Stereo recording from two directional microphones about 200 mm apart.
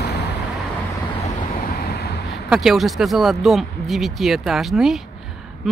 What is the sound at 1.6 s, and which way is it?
Vehicle, 50° left (ahead or behind).